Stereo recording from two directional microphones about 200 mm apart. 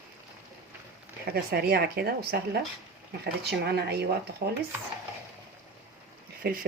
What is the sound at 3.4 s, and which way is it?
Speech, 55° right (ahead or behind).